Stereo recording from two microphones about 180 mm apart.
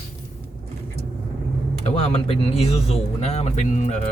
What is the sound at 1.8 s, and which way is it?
Speech, 35° left (ahead or behind).